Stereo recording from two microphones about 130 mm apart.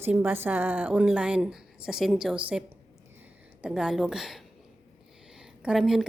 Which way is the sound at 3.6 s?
5° right (ahead or behind).